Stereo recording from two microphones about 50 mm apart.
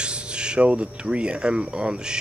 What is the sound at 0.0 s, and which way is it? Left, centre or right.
Speech, centre.